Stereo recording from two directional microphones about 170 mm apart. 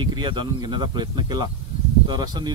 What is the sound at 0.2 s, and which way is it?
Speech, 30° right (ahead or behind).